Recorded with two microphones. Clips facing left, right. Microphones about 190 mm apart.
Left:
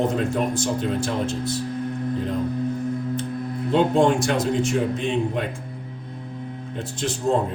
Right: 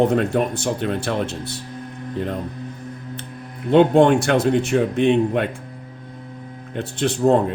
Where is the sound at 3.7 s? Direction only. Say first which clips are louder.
Right 5 dB; 65° right (ahead or behind).